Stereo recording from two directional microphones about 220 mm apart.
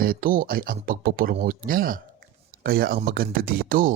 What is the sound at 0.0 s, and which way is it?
Speech, 40° right (ahead or behind).